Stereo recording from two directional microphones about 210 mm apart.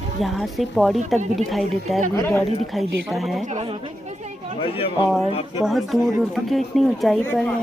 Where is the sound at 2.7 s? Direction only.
Centre (ahead or behind).